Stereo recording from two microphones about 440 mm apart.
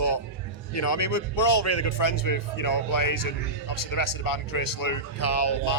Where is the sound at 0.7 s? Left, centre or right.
Left.